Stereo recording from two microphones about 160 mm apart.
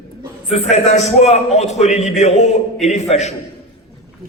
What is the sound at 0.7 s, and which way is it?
A man's voice, 45° left (ahead or behind).